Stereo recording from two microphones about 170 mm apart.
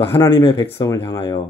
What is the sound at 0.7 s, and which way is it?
Speech, 20° left (ahead or behind).